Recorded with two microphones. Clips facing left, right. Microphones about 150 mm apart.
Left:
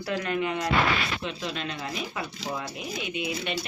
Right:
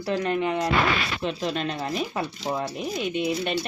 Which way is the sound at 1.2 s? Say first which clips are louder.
Right 6 dB; 40° right (ahead or behind).